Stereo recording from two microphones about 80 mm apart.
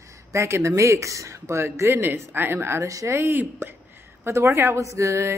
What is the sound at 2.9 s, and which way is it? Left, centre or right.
Speech, right.